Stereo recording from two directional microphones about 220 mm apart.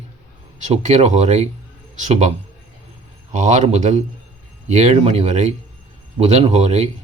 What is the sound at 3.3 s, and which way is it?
Speech, 35° right (ahead or behind).